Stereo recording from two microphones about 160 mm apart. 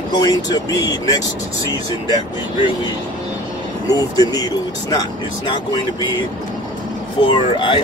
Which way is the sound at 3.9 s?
25° left (ahead or behind).